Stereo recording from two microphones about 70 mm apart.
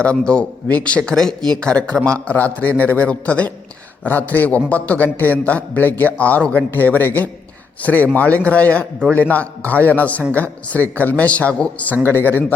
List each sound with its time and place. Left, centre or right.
0.0 s a man's voice: centre
12.0 s a man's voice: left